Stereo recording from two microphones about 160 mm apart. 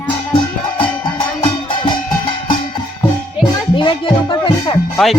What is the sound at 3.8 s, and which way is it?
Music, 30° left (ahead or behind).